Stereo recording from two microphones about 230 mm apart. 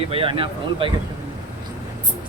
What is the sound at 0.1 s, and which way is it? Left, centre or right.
Speech, right.